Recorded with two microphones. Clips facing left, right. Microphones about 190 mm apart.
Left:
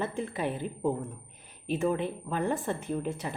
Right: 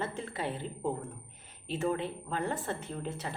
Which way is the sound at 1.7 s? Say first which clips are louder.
Left 4 dB; 15° left (ahead or behind).